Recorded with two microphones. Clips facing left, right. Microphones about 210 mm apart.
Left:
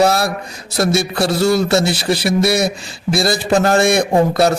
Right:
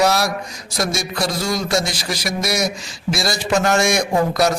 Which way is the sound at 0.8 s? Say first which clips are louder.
Left 6 dB; 60° left (ahead or behind).